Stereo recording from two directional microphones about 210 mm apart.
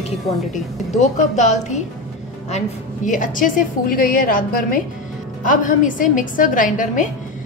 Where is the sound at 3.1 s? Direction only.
40° left (ahead or behind).